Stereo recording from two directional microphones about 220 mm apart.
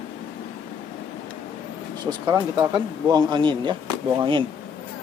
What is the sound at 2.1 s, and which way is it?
Speech, 20° right (ahead or behind).